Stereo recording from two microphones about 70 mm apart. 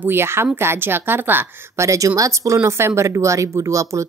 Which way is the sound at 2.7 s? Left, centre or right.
Right.